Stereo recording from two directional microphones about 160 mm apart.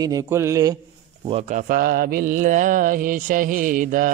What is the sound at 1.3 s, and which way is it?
Mantra, 45° right (ahead or behind).